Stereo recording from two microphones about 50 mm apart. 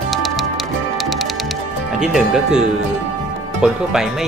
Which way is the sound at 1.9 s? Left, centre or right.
Centre.